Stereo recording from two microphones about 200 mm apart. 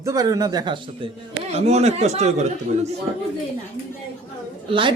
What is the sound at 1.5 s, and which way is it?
Speech, 30° right (ahead or behind).